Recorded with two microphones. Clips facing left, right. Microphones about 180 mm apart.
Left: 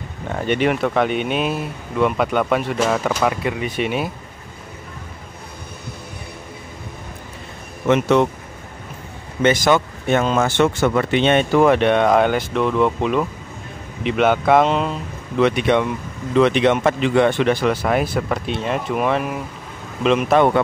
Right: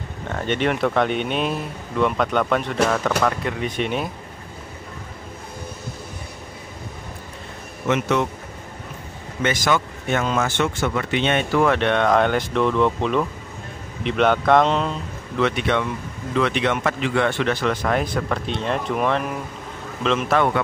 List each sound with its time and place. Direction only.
0.3 s speech: 10° left (ahead or behind)
7.9 s speech: 30° left (ahead or behind)
9.4 s speech: 25° left (ahead or behind); by 15.0 s 5° left (ahead or behind)
15.3 s speech: 15° left (ahead or behind)